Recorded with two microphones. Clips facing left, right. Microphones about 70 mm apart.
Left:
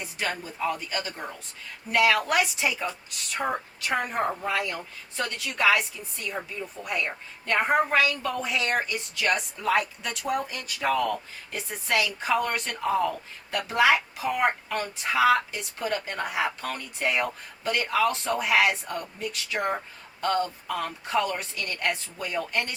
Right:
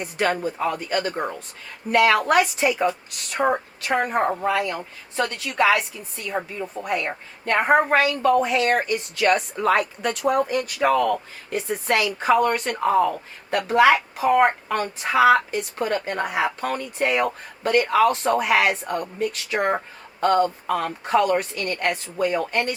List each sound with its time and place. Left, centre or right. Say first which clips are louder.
0.0 s a woman's voice: right 9 dB; right
3.4 s speech: right 8 dB; right
3.8 s a woman's voice: right 5 dB; right